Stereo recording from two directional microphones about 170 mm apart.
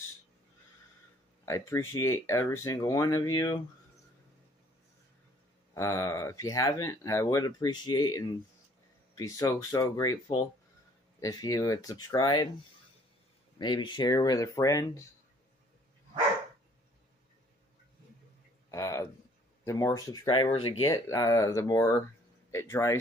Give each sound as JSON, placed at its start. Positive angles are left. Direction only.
{"t": 1.4, "sound": "speech", "side_deg": 15}
{"t": 5.8, "sound": "speech", "side_deg": 20}
{"t": 13.6, "sound": "speech", "side_deg": 25}
{"t": 18.7, "sound": "a sound", "side_deg": 20}
{"t": 19.6, "sound": "speech", "side_deg": 15}
{"t": 20.8, "sound": "speech", "side_deg": 20}